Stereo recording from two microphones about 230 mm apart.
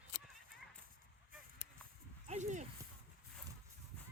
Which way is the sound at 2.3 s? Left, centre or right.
Right.